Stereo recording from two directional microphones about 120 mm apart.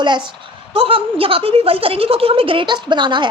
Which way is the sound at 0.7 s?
50° right (ahead or behind).